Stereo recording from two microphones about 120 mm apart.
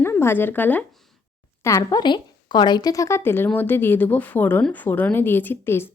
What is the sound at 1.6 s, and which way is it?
Speech, 25° left (ahead or behind).